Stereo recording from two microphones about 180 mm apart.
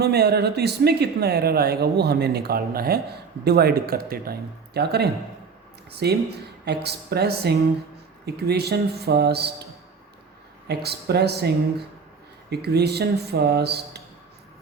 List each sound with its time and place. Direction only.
0.0 s speech: 65° right (ahead or behind)
10.7 s speech: 65° right (ahead or behind)